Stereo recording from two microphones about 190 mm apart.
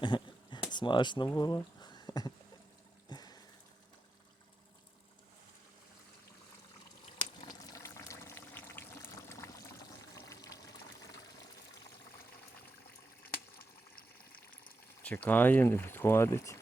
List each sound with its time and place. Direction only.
0.0 s a sound: 25° left (ahead or behind)
7.4 s pour: 20° left (ahead or behind)
15.0 s speech: 10° left (ahead or behind)